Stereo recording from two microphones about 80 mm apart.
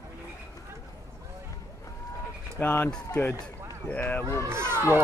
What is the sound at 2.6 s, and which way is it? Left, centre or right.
Speech, left.